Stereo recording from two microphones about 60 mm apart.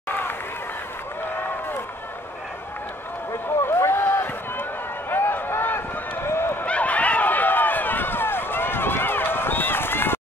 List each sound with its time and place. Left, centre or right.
3.6 s run: left
5.1 s a sound: left
6.2 s run: left
6.6 s run: left